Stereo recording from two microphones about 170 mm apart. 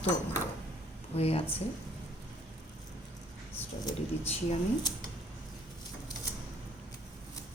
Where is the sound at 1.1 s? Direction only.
35° left (ahead or behind).